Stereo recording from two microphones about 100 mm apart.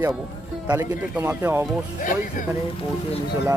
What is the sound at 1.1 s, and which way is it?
Speech, 15° right (ahead or behind).